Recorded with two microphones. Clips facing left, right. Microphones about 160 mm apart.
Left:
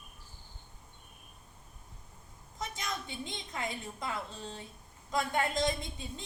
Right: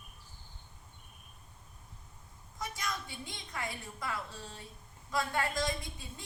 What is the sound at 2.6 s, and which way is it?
A woman's voice, 20° left (ahead or behind).